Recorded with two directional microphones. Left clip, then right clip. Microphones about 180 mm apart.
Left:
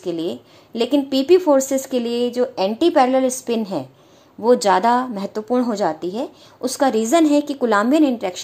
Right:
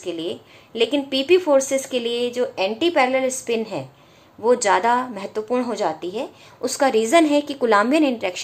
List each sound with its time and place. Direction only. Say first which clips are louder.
0.0 s a woman's voice: left 3 dB; 40° left (ahead or behind); by 8.4 s 25° left (ahead or behind)